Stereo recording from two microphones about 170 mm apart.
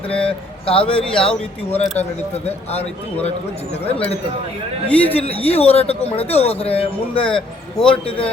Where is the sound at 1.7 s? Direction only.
40° left (ahead or behind).